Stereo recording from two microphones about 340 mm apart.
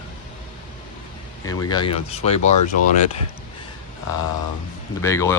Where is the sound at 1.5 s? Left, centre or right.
Centre.